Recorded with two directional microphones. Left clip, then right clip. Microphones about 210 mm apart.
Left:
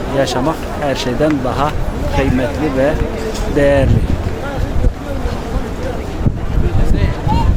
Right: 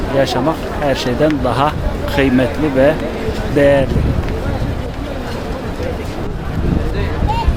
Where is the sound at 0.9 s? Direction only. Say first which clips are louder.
Right 1 dB; 5° right (ahead or behind).